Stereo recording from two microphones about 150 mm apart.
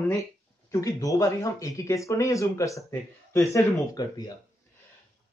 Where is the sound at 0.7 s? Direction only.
20° left (ahead or behind).